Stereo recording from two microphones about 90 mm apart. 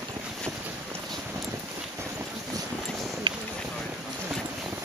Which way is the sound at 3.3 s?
60° right (ahead or behind).